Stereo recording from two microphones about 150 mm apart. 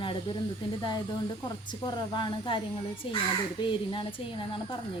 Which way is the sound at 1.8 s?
30° left (ahead or behind).